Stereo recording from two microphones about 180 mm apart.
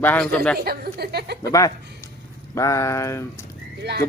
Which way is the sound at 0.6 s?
60° right (ahead or behind).